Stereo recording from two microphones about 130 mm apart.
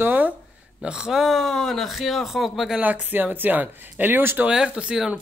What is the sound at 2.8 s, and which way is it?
Speech, 10° right (ahead or behind).